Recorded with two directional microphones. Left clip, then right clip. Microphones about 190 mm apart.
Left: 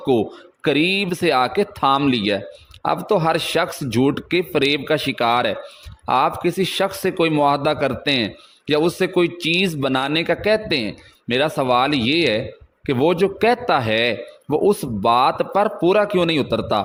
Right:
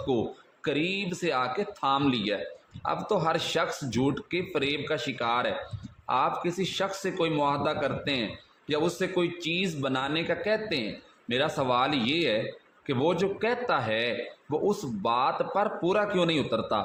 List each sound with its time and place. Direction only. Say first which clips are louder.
0.0 s a man's voice: left 10 dB; 45° left (ahead or behind)